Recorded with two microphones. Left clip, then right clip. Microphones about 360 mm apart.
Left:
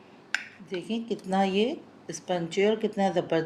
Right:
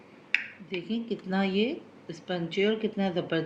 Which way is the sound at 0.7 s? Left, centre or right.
Left.